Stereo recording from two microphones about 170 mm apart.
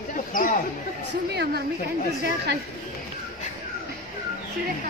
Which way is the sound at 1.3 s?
70° right (ahead or behind).